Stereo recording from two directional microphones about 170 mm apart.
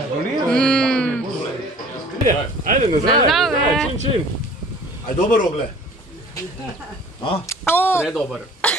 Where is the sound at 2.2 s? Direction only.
50° right (ahead or behind).